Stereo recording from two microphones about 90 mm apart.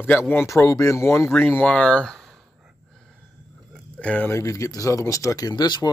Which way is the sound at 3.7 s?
10° left (ahead or behind).